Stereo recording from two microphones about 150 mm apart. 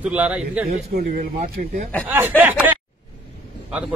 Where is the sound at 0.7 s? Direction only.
75° right (ahead or behind).